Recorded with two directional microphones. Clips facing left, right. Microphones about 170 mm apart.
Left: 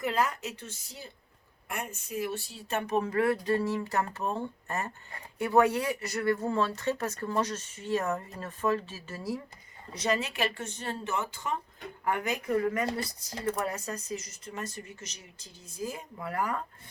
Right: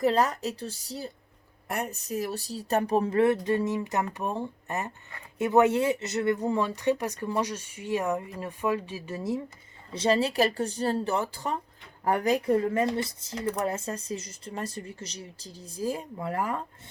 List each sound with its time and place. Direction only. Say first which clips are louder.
0.0 s speech: right 5 dB; 35° right (ahead or behind)